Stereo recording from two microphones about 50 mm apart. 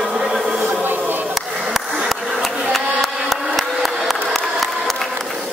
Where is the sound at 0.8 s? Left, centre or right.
Right.